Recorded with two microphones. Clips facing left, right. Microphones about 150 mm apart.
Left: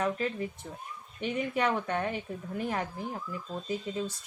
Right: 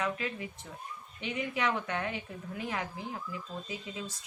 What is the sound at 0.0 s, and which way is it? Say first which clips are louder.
Speech: left 4 dB; 45° left (ahead or behind).